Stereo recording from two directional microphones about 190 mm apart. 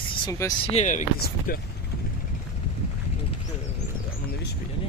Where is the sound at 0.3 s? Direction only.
20° left (ahead or behind).